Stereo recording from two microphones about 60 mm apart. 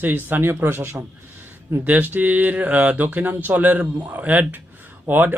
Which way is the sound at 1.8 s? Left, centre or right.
Right.